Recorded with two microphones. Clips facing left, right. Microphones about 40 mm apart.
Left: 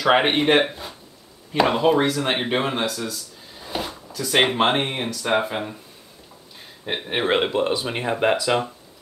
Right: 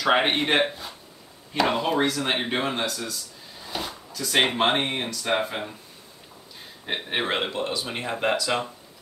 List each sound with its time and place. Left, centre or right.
0.0 s speech: centre
6.9 s speech: centre
7.2 s speech: centre